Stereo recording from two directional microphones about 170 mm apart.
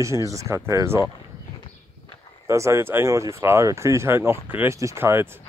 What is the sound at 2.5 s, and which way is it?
Speech, 15° right (ahead or behind).